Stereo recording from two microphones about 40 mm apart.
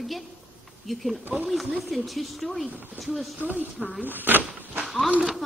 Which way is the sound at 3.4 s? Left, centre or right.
Right.